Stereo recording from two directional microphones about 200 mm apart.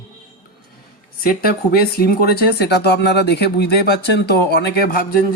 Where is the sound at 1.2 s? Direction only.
50° left (ahead or behind).